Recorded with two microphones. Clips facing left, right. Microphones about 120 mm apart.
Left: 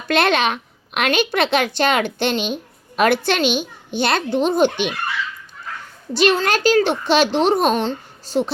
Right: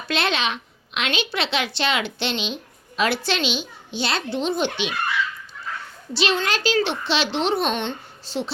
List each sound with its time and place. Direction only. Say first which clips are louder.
0.1 s a woman's voice: left 7 dB; 55° left (ahead or behind)
6.1 s a woman's voice: left 6 dB; 45° left (ahead or behind)